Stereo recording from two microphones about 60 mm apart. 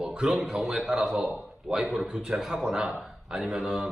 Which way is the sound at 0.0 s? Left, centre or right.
Centre.